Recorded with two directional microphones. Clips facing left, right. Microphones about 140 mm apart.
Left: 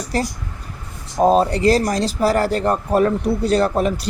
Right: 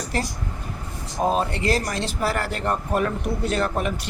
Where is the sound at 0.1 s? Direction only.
40° left (ahead or behind).